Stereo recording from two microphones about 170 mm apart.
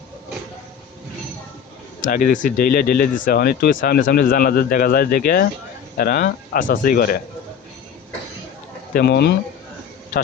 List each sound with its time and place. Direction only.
2.0 s speech: 55° left (ahead or behind)
8.9 s speech: 70° left (ahead or behind)